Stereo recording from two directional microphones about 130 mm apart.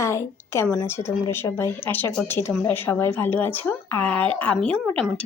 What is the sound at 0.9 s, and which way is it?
A woman's voice, 20° left (ahead or behind).